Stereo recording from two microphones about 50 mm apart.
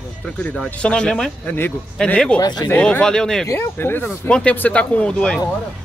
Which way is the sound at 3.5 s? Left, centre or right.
Left.